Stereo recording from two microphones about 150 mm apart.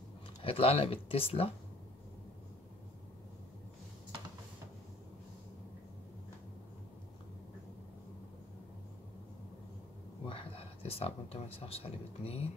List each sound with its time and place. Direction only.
0.4 s speech: 40° left (ahead or behind)
10.2 s speech: 40° left (ahead or behind)